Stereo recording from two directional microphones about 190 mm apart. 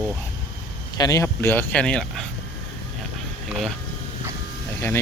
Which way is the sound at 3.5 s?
Centre (ahead or behind).